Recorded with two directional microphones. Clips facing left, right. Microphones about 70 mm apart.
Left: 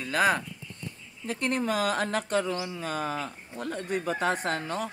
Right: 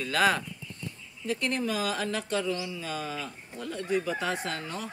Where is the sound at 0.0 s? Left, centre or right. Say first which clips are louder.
Even; left.